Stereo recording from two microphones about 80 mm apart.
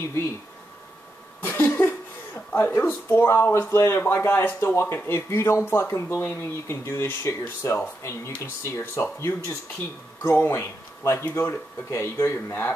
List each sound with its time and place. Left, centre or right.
1.4 s music: left
2.8 s speech: left